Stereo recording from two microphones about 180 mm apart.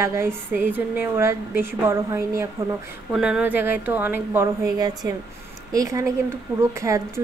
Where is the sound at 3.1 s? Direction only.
5° right (ahead or behind).